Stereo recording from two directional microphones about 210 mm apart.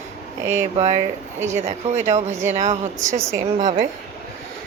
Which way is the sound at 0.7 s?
30° right (ahead or behind).